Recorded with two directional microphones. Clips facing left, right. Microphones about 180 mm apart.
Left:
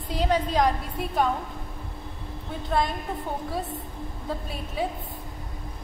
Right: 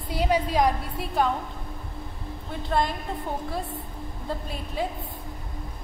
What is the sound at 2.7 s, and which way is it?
Speech, 5° right (ahead or behind).